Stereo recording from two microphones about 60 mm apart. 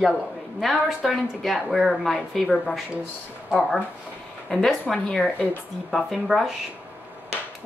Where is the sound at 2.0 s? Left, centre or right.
Centre.